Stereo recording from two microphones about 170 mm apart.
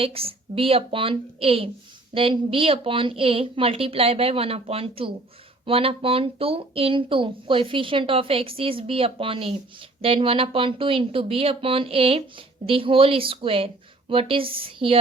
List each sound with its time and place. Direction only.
0.0 s speech: 35° right (ahead or behind)